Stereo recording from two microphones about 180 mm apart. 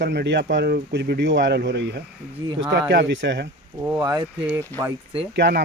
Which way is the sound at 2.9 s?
80° right.